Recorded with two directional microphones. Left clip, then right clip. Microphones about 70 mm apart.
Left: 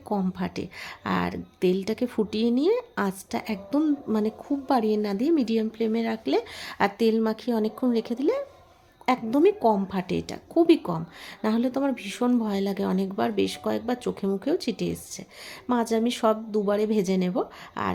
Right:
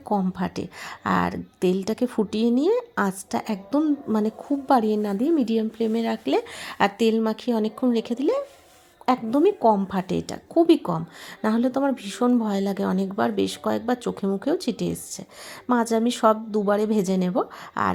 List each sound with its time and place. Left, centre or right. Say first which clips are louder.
0.3 s a woman's voice: right 3 dB; right
9.6 s a woman's voice: right 3 dB; centre
9.9 s a woman's voice: right 2 dB; right